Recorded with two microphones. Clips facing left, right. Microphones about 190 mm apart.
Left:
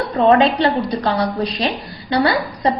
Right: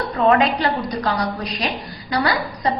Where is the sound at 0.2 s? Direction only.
30° left (ahead or behind).